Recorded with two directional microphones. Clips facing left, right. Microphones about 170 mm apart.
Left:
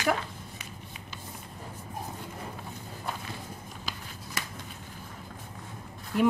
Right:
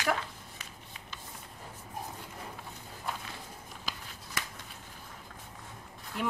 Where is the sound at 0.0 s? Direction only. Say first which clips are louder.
Left 3 dB; 10° left (ahead or behind).